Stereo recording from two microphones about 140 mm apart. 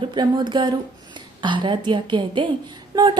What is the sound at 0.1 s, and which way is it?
A woman's voice, 30° right (ahead or behind).